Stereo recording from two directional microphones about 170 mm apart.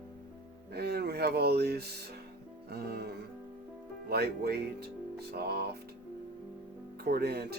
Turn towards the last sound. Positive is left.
turn(degrees=-70)  # may be behind; listen again after turning